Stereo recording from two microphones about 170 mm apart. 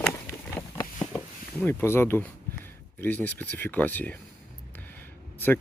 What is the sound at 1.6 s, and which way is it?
Speech, 15° left (ahead or behind).